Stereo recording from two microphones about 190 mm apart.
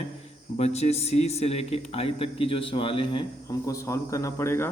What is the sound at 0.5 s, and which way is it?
Speech, 35° left (ahead or behind).